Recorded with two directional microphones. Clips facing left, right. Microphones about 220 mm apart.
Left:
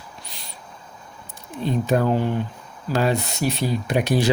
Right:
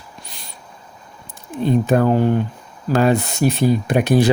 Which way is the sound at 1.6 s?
50° right (ahead or behind).